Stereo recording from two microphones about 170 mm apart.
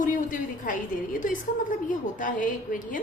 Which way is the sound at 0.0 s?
50° left (ahead or behind).